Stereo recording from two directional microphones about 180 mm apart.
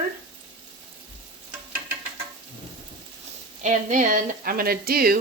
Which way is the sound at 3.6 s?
45° right (ahead or behind).